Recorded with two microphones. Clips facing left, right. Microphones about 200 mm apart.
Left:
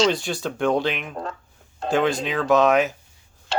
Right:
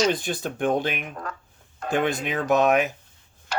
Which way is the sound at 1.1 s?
25° left (ahead or behind).